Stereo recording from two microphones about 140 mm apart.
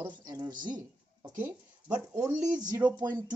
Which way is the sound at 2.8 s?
30° right (ahead or behind).